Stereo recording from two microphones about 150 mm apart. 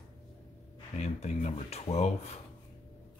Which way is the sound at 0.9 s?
50° left (ahead or behind).